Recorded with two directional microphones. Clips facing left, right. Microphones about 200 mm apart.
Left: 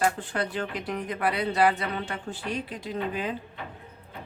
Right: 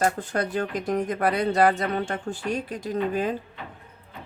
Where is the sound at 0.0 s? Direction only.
45° right (ahead or behind).